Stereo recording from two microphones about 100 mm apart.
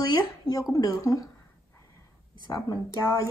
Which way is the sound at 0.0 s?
40° left (ahead or behind).